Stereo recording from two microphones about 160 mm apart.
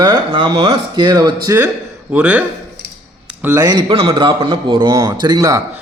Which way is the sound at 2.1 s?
10° right (ahead or behind).